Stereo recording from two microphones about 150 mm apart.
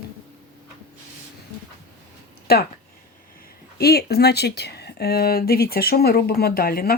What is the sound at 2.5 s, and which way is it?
Speech, 90° left.